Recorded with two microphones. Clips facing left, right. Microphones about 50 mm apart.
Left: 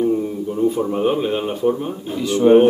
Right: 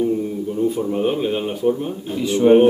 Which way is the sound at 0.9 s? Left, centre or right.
Centre.